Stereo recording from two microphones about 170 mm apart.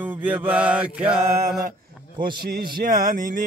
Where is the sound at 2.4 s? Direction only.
60° right (ahead or behind).